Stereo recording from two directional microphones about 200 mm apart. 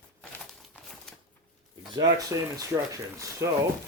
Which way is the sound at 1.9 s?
20° right (ahead or behind).